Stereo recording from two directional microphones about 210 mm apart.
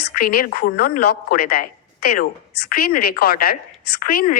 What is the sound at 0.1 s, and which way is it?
A woman's voice, 45° left (ahead or behind).